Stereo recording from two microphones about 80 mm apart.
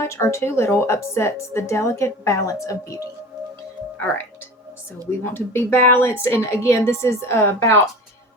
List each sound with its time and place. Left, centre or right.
0.0 s a woman's voice: left
5.2 s a woman's voice: left